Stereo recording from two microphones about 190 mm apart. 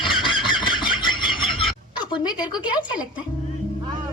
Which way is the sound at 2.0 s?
25° left (ahead or behind).